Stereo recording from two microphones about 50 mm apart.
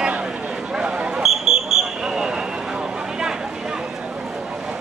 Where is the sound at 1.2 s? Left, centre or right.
Centre.